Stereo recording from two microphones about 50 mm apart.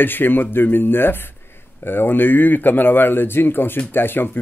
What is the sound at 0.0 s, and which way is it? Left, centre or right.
Speech, left.